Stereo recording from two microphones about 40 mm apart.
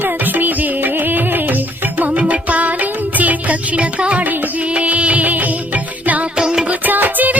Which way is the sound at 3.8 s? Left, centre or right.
Right.